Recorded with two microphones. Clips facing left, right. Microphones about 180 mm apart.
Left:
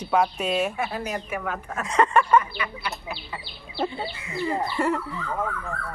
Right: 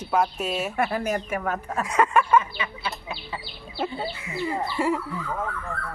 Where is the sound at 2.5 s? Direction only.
25° right (ahead or behind).